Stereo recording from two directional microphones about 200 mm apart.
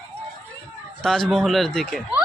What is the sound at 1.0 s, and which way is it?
Speech, centre (ahead or behind).